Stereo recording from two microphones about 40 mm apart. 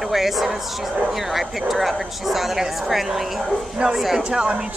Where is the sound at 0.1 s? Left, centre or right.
Centre.